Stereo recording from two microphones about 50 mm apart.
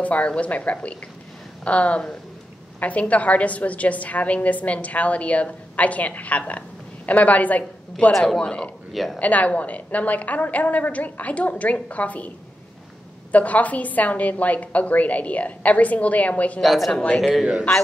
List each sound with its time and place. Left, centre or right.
0.0 s a woman's voice: left
8.4 s a woman's voice: left
8.9 s speech: centre
9.2 s a woman's voice: left
13.3 s a woman's voice: left
16.6 s speech: centre